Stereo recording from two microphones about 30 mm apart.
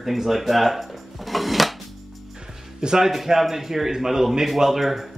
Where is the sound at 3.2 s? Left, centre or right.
Centre.